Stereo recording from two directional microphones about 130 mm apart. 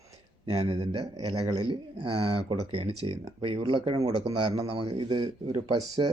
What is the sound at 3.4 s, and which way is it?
Speech, 40° right (ahead or behind).